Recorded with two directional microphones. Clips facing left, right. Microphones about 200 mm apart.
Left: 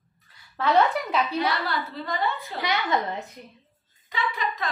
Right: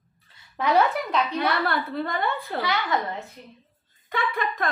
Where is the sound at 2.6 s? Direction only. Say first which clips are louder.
Left 1 dB; 20° left (ahead or behind).